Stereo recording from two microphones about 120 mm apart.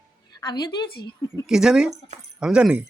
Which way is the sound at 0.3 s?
35° left (ahead or behind).